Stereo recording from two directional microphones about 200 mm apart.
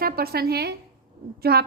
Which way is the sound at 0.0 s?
50° right (ahead or behind).